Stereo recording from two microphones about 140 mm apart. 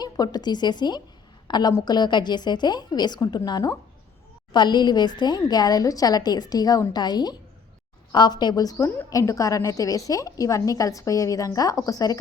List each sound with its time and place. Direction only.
0.0 s a woman's voice: 30° left (ahead or behind)